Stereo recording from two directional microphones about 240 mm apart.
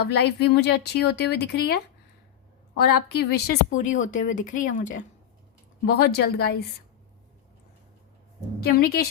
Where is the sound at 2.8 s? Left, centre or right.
Left.